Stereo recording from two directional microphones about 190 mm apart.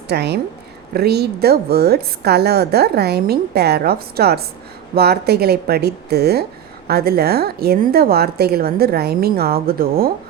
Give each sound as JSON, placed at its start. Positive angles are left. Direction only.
{"t": 0.1, "sound": "a woman's voice", "side_deg": -60}